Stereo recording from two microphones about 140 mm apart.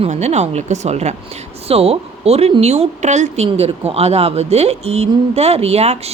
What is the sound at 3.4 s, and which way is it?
Speech, 45° right (ahead or behind).